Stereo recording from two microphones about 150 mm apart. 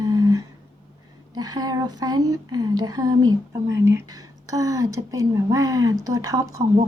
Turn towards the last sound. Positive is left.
turn(degrees=-20)  # may be behind; listen again after turning